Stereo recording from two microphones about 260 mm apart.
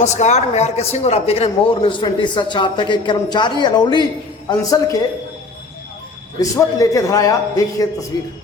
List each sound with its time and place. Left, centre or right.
0.0 s speech: left
6.4 s speech: centre